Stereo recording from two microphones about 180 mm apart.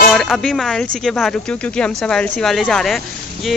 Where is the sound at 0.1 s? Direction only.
Centre (ahead or behind).